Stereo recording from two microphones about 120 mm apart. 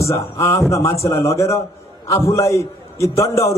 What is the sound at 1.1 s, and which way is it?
Speech, 55° left (ahead or behind).